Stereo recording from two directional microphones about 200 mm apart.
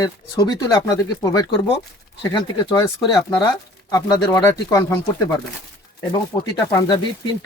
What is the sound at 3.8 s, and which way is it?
Speech, 20° left (ahead or behind).